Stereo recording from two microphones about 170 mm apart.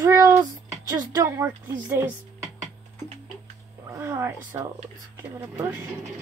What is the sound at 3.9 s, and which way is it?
Speech, 15° right (ahead or behind).